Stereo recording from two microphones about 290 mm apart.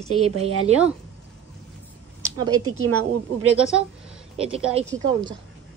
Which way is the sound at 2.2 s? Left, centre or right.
Centre.